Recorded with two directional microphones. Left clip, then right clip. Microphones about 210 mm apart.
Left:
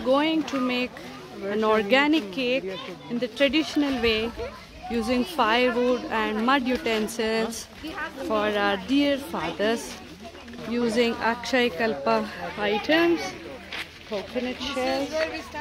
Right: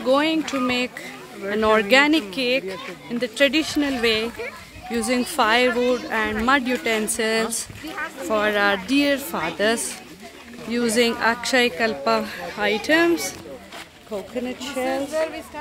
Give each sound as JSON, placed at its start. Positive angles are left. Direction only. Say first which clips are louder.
{"t": 0.0, "sound": "a woman's voice", "louder": "right 3 dB", "side_deg": -5}
{"t": 14.7, "sound": "a woman's voice", "louder": "right 3 dB", "side_deg": -5}